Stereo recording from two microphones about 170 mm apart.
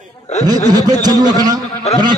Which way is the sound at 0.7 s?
20° right (ahead or behind).